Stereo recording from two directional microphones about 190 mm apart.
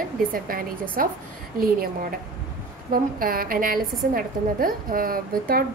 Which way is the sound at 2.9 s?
50° right (ahead or behind).